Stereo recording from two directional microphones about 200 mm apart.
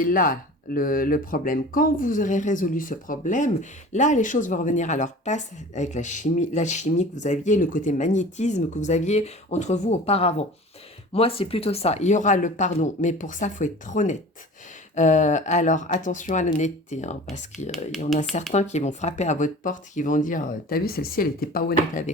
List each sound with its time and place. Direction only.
0.0 s speech: 45° left (ahead or behind)
18.2 s speech: 35° left (ahead or behind)